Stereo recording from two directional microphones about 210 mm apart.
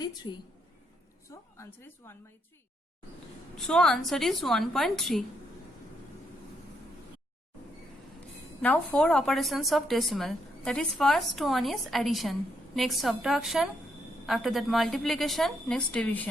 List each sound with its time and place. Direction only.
0.0 s a woman's voice: 20° left (ahead or behind)
1.3 s a sound: 15° left (ahead or behind)
3.5 s a woman's voice: 5° left (ahead or behind)
8.6 s a woman's voice: 5° left (ahead or behind)